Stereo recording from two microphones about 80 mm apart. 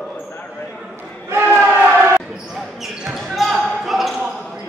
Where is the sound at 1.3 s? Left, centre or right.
Right.